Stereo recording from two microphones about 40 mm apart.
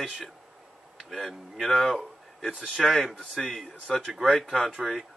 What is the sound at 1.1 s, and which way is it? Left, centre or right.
Speech, centre.